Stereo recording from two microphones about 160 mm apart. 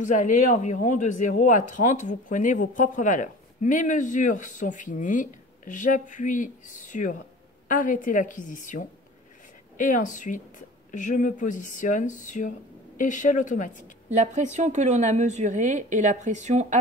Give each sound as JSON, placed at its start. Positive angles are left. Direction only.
{"t": 0.0, "sound": "speech", "side_deg": 55}
{"t": 14.1, "sound": "a woman's voice", "side_deg": -50}